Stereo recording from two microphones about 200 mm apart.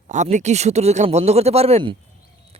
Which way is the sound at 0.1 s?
35° right (ahead or behind).